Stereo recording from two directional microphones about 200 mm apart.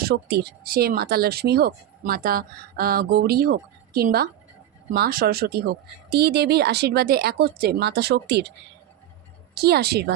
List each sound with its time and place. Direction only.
0.0 s speech: 50° right (ahead or behind)
9.6 s speech: 55° right (ahead or behind)